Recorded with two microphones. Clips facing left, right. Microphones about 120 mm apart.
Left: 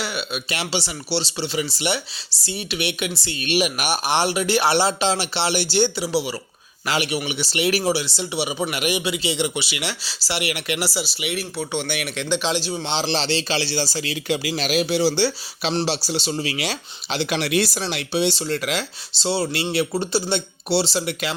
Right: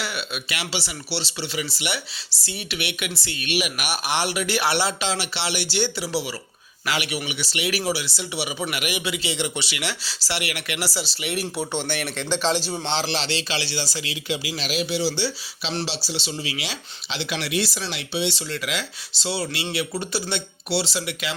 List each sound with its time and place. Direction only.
0.0 s speech: 20° left (ahead or behind)
6.0 s speech: 15° left (ahead or behind)
6.8 s speech: 30° left (ahead or behind); by 11.3 s 10° left (ahead or behind)
11.3 s speech: 10° right (ahead or behind)
11.7 s speech: centre (ahead or behind)
12.8 s speech: 20° left (ahead or behind)
13.1 s speech: 35° left (ahead or behind)